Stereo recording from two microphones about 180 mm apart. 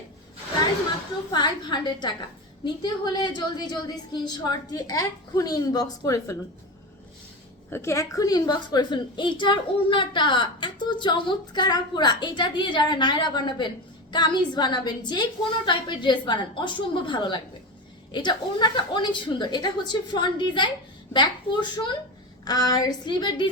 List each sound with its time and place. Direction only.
1.3 s a woman's voice: 25° left (ahead or behind)
7.7 s a woman's voice: 15° left (ahead or behind)